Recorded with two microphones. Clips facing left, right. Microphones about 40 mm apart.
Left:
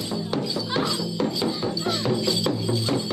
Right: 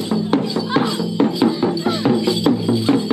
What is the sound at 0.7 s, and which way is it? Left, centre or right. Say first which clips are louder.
Music: right 8 dB; right.